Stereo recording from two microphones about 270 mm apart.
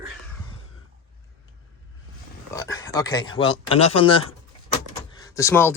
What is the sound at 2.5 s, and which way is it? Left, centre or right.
Speech, centre.